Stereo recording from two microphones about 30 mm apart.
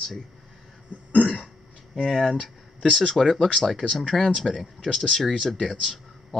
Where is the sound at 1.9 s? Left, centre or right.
Left; by 4.6 s centre.